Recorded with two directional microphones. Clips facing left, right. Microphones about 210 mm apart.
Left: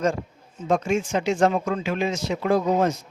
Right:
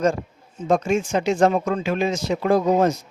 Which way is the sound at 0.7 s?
40° right (ahead or behind).